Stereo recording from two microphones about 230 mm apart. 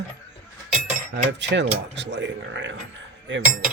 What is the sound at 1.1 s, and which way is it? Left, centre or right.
Speech, right.